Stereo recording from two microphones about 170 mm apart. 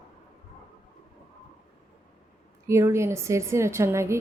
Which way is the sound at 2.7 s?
15° right (ahead or behind).